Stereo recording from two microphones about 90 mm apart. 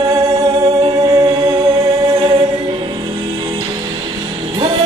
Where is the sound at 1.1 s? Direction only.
65° right (ahead or behind).